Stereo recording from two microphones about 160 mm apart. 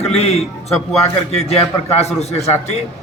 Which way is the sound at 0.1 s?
40° left (ahead or behind).